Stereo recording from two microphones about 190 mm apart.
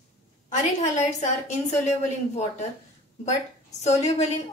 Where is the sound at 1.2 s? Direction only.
35° left (ahead or behind).